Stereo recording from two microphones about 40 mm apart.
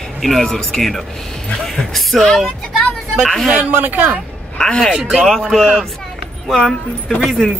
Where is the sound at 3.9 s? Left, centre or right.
Right.